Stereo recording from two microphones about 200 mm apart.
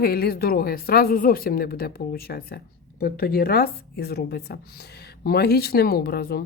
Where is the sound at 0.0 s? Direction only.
50° left (ahead or behind).